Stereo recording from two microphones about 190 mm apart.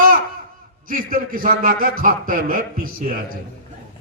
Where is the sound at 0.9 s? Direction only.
50° right (ahead or behind).